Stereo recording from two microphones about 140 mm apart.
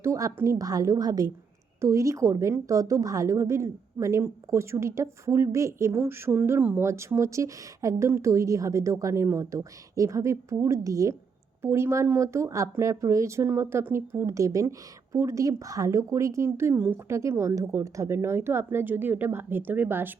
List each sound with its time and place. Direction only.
0.0 s a woman's voice: 20° right (ahead or behind)